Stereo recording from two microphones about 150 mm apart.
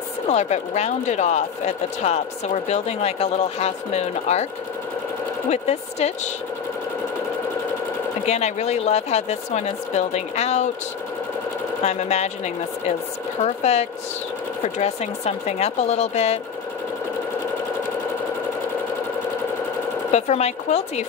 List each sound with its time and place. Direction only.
0.3 s speech: 45° left (ahead or behind)
5.5 s speech: 45° left (ahead or behind)
8.3 s speech: 50° left (ahead or behind)
11.8 s speech: 45° left (ahead or behind)
13.4 s speech: 45° left (ahead or behind)
20.1 s speech: 50° left (ahead or behind)